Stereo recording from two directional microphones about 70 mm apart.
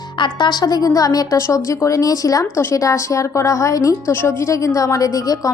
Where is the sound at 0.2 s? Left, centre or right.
Left.